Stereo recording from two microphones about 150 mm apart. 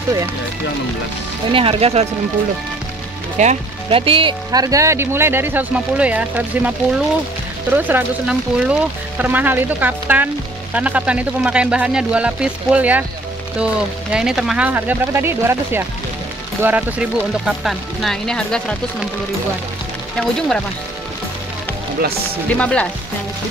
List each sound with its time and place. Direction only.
1.5 s speech: 40° right (ahead or behind)
3.4 s speech: 50° right (ahead or behind)
3.9 s speech: 35° right (ahead or behind)
4.5 s speech: 25° right (ahead or behind)
7.7 s speech: 10° right (ahead or behind)
20.2 s speech: 5° left (ahead or behind)
22.5 s speech: 10° left (ahead or behind)